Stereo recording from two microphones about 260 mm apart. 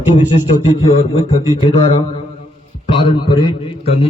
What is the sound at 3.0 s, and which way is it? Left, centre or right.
Speech, centre.